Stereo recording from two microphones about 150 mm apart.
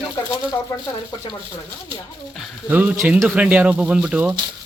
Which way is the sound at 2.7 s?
10° right (ahead or behind).